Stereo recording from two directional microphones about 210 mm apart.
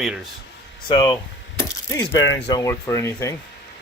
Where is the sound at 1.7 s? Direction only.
15° left (ahead or behind).